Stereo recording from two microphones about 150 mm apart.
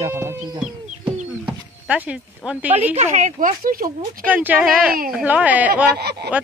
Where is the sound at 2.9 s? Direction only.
50° right (ahead or behind); by 3.9 s 70° right (ahead or behind).